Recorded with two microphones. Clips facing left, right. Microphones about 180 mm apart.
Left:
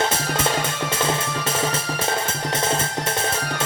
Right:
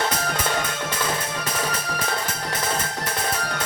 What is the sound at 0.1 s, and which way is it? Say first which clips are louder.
Music: left 2 dB; 25° left (ahead or behind).